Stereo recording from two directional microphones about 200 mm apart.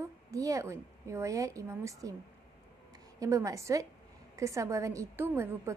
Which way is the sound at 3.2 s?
15° right (ahead or behind).